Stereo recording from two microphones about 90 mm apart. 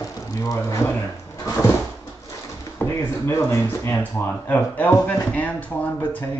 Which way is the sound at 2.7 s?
30° left (ahead or behind).